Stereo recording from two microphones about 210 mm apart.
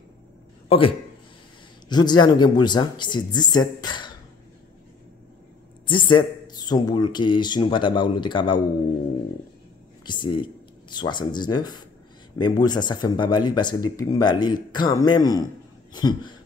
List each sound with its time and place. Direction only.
0.7 s a man's voice: 25° left (ahead or behind)
5.9 s speech: 20° left (ahead or behind)
10.0 s speech: 20° left (ahead or behind)